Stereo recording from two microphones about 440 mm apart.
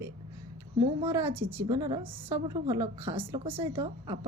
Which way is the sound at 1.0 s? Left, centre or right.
Centre.